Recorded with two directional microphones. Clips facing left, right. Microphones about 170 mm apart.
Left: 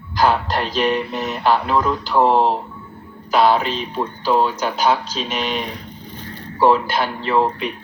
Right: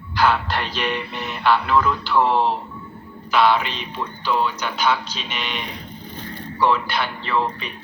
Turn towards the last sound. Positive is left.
turn(degrees=40)  # may be behind; listen again after turning